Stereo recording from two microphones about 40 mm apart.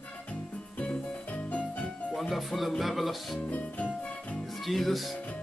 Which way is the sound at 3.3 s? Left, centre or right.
Left.